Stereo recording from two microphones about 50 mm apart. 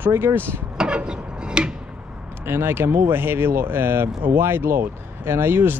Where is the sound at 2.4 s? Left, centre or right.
Right.